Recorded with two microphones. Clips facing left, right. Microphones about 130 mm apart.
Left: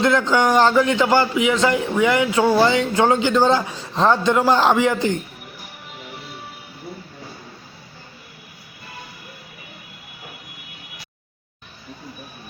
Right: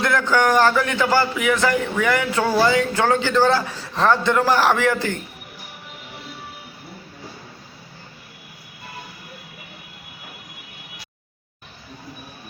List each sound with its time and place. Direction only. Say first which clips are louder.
0.0 s a man's voice: left 2 dB; 20° left (ahead or behind)